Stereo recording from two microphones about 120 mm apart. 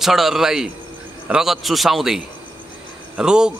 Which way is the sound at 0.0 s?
Centre (ahead or behind).